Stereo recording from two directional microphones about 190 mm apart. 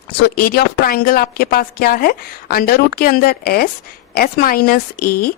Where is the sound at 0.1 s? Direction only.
55° left (ahead or behind).